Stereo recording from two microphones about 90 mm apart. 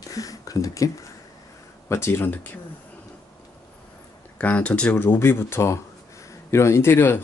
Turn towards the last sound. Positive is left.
turn(degrees=25)  # may be behind; listen again after turning